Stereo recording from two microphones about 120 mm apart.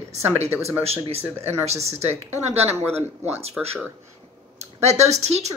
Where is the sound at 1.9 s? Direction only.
65° right (ahead or behind).